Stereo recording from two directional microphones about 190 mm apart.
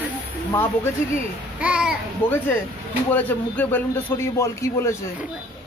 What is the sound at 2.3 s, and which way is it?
A man's voice, 10° left (ahead or behind).